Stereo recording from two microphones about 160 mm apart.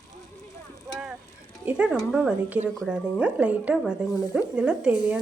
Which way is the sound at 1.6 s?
5° right (ahead or behind).